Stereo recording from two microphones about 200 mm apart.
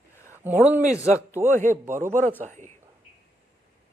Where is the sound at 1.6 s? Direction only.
40° right (ahead or behind).